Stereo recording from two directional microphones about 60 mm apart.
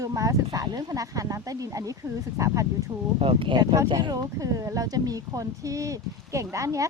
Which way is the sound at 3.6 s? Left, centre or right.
Right.